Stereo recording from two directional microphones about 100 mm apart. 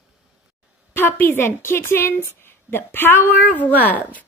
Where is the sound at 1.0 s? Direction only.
20° left (ahead or behind).